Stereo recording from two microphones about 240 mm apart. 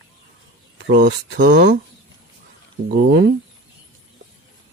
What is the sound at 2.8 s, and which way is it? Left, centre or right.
Speech, right.